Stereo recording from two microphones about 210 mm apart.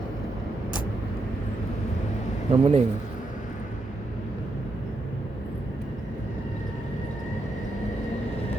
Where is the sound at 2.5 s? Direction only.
30° right (ahead or behind).